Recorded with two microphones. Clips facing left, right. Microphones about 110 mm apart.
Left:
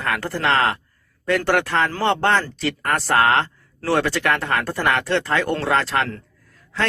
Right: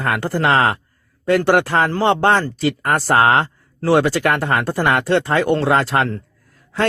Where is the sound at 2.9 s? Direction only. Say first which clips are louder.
Right 3 dB; 30° right (ahead or behind).